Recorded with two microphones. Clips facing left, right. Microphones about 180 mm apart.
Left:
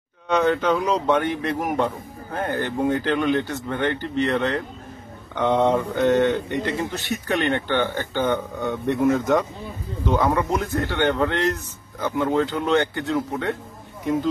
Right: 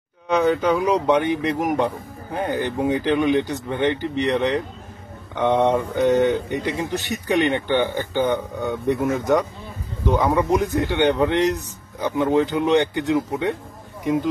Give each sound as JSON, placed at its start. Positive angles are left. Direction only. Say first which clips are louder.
{"t": 0.4, "sound": "speech", "louder": "right 2 dB", "side_deg": -10}